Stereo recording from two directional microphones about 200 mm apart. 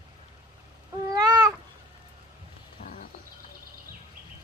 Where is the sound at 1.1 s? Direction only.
20° right (ahead or behind).